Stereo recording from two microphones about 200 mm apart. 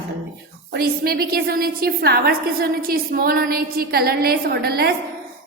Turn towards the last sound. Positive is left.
turn(degrees=-50)  # may be behind; listen again after turning